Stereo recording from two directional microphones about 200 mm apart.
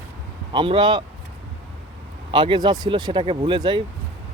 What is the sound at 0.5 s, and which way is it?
Speech, 25° right (ahead or behind).